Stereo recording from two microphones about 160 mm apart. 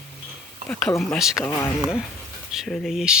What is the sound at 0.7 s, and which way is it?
Dishes, 10° left (ahead or behind).